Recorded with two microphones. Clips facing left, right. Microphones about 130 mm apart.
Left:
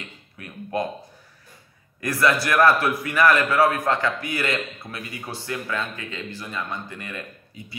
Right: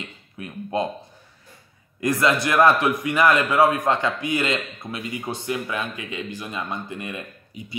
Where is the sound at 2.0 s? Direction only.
20° right (ahead or behind).